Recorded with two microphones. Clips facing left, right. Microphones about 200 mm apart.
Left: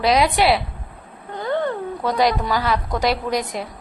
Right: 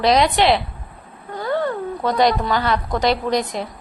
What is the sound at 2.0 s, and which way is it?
A woman's voice, 5° left (ahead or behind).